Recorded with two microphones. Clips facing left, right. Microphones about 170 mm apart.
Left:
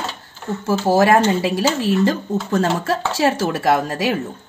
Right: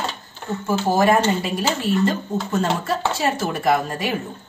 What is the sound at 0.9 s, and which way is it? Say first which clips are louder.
Speech: left 3 dB; 90° left.